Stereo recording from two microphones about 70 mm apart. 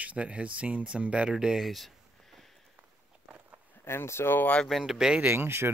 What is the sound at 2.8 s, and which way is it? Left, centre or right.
Walk, right.